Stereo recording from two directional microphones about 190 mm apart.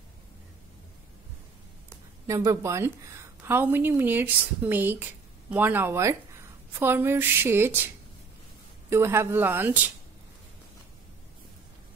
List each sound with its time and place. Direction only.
2.2 s a woman's voice: 15° right (ahead or behind)
8.9 s a woman's voice: 15° right (ahead or behind)